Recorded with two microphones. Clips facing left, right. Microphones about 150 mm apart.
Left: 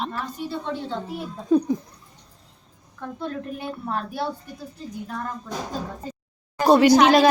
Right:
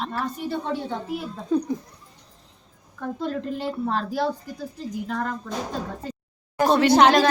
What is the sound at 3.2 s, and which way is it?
A woman's voice, 90° right.